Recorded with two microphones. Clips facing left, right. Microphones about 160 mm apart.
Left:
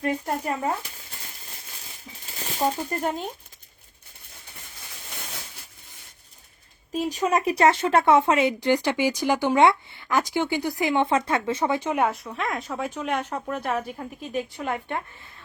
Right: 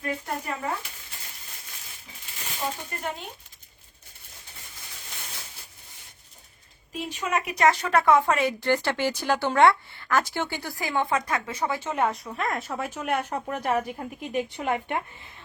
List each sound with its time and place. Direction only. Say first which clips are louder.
0.0 s speech: left 5 dB; 40° left (ahead or behind)
2.3 s a sound: left 7 dB; 40° left (ahead or behind)
6.9 s speech: left 5 dB; 40° left (ahead or behind); by 12.1 s 10° left (ahead or behind)
12.1 s speech: even; centre (ahead or behind); by 15.3 s 15° right (ahead or behind)